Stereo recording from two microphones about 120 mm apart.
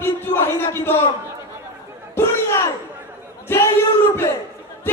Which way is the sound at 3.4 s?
20° left (ahead or behind).